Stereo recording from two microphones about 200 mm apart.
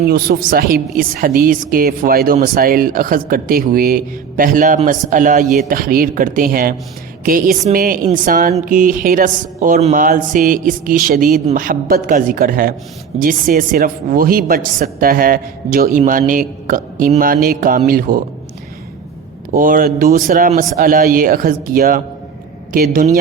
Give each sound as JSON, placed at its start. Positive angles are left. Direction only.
{"t": 0.0, "sound": "a woman's voice", "side_deg": -50}
{"t": 19.5, "sound": "a woman's voice", "side_deg": -45}